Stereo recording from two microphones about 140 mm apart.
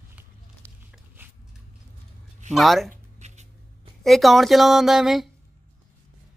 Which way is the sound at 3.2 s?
55° right (ahead or behind).